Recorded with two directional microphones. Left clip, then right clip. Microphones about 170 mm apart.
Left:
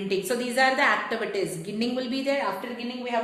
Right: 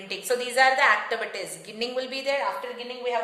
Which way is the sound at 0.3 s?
30° right (ahead or behind).